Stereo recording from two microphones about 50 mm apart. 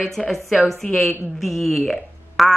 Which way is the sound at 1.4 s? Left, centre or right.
Centre.